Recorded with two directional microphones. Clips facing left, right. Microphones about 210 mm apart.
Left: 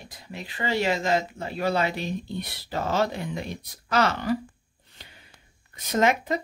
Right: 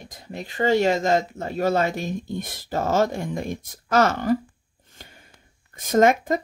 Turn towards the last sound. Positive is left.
turn(degrees=-45)  # may be behind; listen again after turning